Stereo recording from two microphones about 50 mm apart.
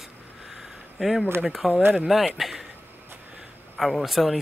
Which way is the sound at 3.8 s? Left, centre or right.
Centre.